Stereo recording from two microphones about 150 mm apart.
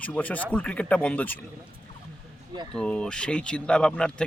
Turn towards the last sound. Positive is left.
turn(degrees=5)  # may be behind; listen again after turning